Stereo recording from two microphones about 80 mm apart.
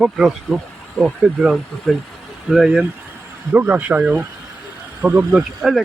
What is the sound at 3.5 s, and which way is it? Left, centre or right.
Speech, right.